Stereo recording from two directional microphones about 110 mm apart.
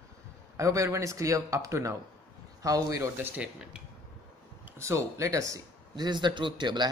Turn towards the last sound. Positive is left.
turn(degrees=-45)  # may be behind; listen again after turning